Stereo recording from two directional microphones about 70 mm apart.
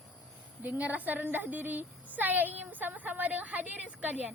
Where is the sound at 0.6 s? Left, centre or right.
Right.